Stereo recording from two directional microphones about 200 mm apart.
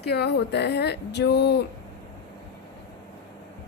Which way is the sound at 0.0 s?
55° left (ahead or behind).